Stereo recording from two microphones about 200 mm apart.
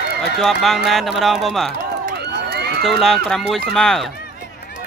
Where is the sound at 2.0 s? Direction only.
55° right (ahead or behind).